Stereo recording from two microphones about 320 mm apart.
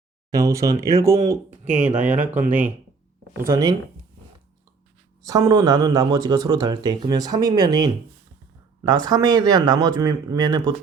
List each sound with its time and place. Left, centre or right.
0.3 s speech: centre
1.6 s speech: right
3.3 s speech: centre
5.2 s speech: centre